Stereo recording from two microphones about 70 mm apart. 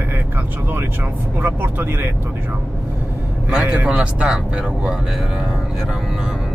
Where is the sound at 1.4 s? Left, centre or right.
Right.